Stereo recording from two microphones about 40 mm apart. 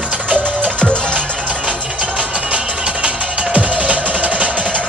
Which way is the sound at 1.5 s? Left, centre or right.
Right.